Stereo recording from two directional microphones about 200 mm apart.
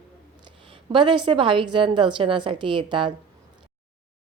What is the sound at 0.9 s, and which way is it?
Speech, 25° right (ahead or behind).